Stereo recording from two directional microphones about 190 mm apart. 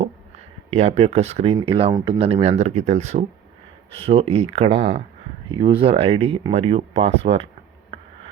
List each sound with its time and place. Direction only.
0.0 s speech: 35° right (ahead or behind)
1.9 s speech: 15° right (ahead or behind)
2.1 s speech: 30° right (ahead or behind)
5.5 s speech: 25° right (ahead or behind)